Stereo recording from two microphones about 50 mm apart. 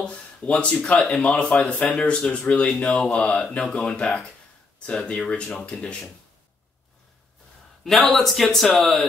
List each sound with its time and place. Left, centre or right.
0.0 s a sound: left
1.0 s speech: left
7.8 s a man's voice: centre